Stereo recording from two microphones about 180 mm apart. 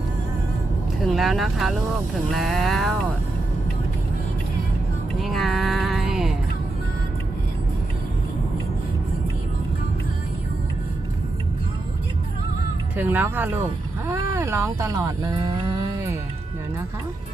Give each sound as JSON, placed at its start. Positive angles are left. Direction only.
{"t": 1.1, "sound": "speech", "side_deg": 0}
{"t": 5.2, "sound": "music", "side_deg": 0}
{"t": 13.0, "sound": "speech", "side_deg": -10}
{"t": 14.1, "sound": "a sound", "side_deg": -15}